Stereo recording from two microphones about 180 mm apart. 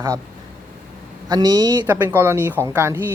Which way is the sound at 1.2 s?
20° right (ahead or behind).